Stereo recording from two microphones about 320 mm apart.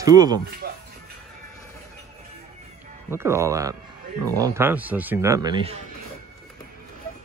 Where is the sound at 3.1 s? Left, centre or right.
Centre.